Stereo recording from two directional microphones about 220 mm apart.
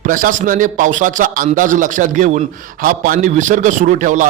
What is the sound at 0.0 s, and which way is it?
A man's voice, 35° right (ahead or behind).